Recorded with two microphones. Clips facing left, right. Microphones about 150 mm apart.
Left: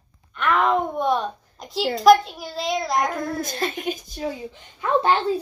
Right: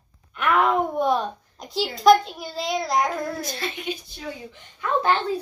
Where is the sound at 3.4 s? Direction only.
45° left (ahead or behind).